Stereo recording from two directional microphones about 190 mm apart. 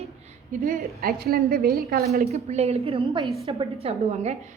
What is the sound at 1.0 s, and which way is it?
Speech, 55° right (ahead or behind).